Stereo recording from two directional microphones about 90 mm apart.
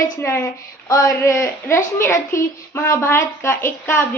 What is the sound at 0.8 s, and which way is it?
A woman's voice, 35° left (ahead or behind).